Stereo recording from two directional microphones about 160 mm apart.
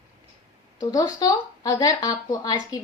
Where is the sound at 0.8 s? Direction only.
20° left (ahead or behind).